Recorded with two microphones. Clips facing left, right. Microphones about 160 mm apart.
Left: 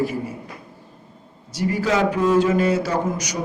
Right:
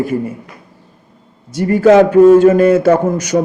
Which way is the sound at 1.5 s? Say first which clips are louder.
Right 12 dB; 50° right (ahead or behind).